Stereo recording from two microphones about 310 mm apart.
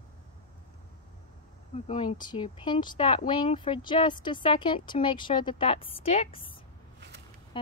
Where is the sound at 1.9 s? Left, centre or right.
Centre.